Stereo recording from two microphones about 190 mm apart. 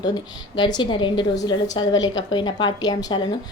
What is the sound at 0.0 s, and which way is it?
Speech, 20° left (ahead or behind).